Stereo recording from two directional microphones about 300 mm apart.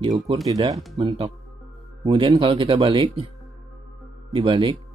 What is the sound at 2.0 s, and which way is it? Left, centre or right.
Speech, centre.